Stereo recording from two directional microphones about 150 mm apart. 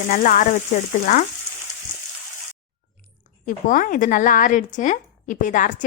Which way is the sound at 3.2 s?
60° left (ahead or behind).